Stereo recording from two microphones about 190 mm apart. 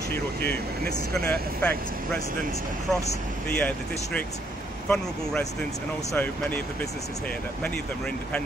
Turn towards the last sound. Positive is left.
turn(degrees=10)  # may be behind; listen again after turning